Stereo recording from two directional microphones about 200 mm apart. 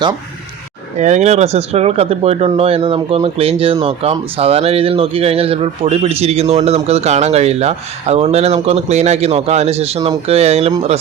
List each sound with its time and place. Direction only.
0.9 s speech: 35° right (ahead or behind)